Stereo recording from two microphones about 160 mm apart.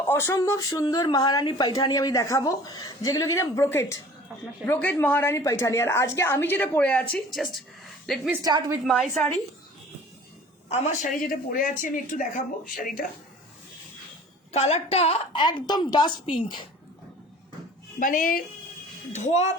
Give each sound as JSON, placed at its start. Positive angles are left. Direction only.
{"t": 0.1, "sound": "a woman's voice", "side_deg": 15}
{"t": 8.4, "sound": "a woman's voice", "side_deg": -25}
{"t": 10.7, "sound": "a woman's voice", "side_deg": 55}
{"t": 14.5, "sound": "a woman's voice", "side_deg": 40}
{"t": 18.0, "sound": "a woman's voice", "side_deg": 55}
{"t": 19.1, "sound": "a child's voice", "side_deg": 45}